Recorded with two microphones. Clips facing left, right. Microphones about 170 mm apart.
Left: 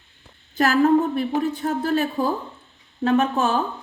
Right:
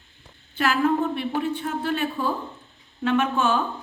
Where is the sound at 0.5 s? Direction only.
40° left (ahead or behind).